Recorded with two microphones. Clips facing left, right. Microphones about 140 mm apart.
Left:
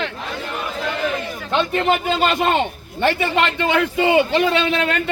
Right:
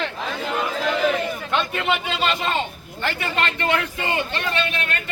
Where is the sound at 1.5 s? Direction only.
35° left (ahead or behind).